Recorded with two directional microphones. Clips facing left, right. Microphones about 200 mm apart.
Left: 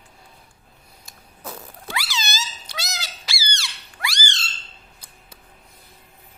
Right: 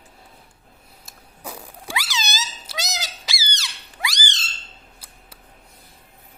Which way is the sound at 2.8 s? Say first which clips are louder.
Right 4 dB; 20° right (ahead or behind).